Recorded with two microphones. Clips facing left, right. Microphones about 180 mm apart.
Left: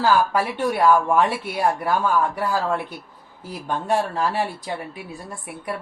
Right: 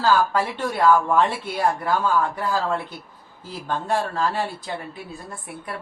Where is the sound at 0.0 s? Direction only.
15° left (ahead or behind).